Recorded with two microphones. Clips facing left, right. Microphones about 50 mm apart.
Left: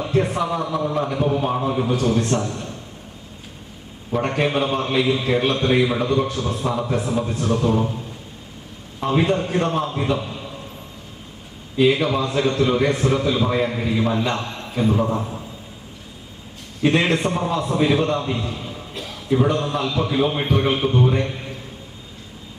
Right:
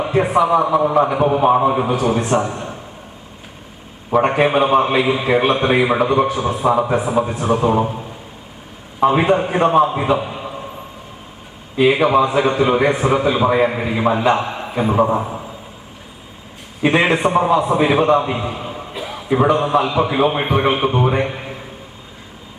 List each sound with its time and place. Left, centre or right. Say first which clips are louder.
0.0 s a man's voice: right 5 dB; right
0.4 s a man's voice: right 8 dB; right
4.1 s a man's voice: right 6 dB; right
9.0 s a man's voice: right 6 dB; right
11.8 s a man's voice: right 5 dB; right
16.8 s a man's voice: right 4 dB; right